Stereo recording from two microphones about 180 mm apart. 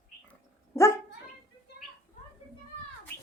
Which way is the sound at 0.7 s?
15° left (ahead or behind).